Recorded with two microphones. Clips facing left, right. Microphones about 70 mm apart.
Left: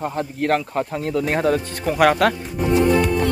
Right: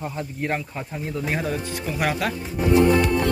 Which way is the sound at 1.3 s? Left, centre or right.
Left.